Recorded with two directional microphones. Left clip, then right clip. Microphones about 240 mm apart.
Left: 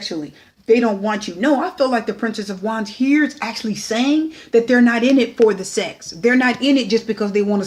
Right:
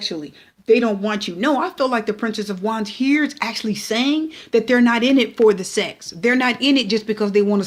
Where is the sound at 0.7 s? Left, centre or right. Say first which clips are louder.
Left 1 dB; right.